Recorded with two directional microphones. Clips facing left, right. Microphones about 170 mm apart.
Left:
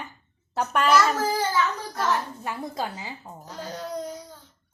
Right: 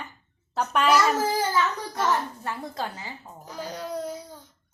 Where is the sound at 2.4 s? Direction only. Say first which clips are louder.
Left 1 dB; 15° left (ahead or behind).